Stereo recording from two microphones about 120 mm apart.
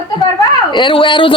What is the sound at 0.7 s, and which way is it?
Speech, 45° left (ahead or behind).